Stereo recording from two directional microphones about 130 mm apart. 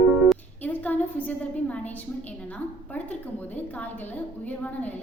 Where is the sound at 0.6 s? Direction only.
15° left (ahead or behind).